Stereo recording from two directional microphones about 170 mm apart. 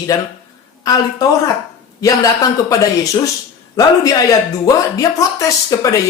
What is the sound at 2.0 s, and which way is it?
Speech, 20° left (ahead or behind).